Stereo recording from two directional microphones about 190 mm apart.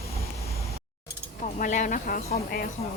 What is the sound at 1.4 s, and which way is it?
Speech, 40° left (ahead or behind).